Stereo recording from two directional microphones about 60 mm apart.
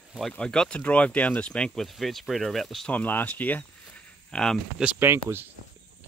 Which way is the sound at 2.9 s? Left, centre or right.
Left.